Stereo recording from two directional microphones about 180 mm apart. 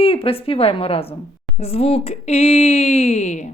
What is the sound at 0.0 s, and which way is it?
Speech, 30° left (ahead or behind).